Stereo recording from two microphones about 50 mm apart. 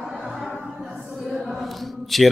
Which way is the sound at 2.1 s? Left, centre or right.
Centre.